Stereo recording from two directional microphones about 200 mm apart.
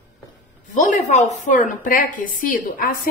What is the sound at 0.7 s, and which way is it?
A woman's voice, 40° left (ahead or behind).